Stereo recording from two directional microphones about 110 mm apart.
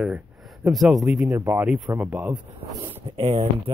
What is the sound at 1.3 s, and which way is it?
Speech, 20° right (ahead or behind).